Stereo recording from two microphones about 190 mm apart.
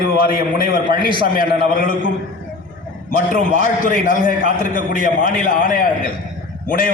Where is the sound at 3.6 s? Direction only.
45° left (ahead or behind).